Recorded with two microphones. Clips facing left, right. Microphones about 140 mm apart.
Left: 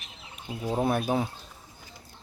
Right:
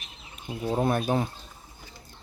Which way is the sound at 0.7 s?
5° left (ahead or behind).